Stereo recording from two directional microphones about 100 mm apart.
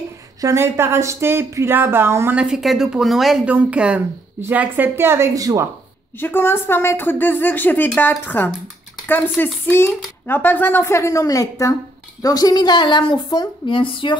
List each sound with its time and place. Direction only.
0.4 s speech: 30° right (ahead or behind)
2.3 s a woman's voice: 5° right (ahead or behind)
3.4 s speech: 15° right (ahead or behind)
5.3 s speech: 35° right (ahead or behind)
6.1 s speech: 20° left (ahead or behind); by 14.1 s 60° left (ahead or behind)